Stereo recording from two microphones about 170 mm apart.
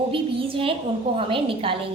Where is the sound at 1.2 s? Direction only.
30° right (ahead or behind).